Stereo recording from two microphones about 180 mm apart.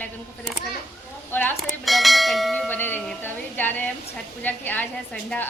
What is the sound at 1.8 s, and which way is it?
Bell, centre (ahead or behind).